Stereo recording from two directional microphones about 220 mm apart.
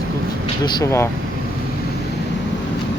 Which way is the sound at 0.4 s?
20° left (ahead or behind).